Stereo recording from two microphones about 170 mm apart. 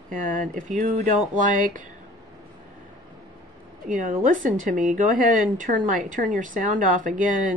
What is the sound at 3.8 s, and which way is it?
A woman's voice, 50° right (ahead or behind).